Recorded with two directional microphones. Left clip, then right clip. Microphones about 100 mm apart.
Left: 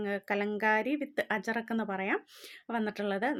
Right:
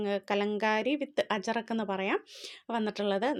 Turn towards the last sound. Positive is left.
turn(degrees=-15)  # may be behind; listen again after turning